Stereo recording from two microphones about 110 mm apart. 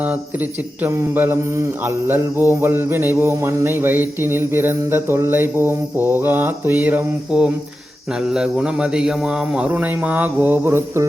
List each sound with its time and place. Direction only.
0.8 s mantra: 20° right (ahead or behind)
8.3 s speech: 5° right (ahead or behind); by 11.0 s 25° right (ahead or behind)